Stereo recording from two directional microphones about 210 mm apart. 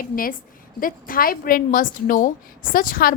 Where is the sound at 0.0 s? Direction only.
40° left (ahead or behind).